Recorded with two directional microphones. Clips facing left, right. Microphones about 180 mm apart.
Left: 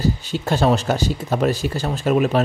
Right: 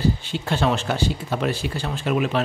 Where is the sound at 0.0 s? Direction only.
40° left (ahead or behind).